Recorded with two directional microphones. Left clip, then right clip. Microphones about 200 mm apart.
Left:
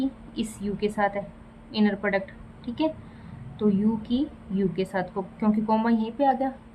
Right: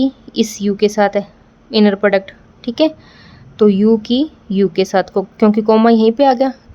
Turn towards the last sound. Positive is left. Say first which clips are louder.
# right 13 dB
turn(degrees=-55)  # may be behind; listen again after turning